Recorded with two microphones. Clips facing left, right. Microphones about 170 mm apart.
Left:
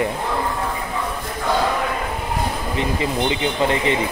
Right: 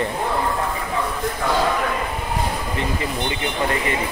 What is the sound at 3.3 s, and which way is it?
Speech, 20° left (ahead or behind).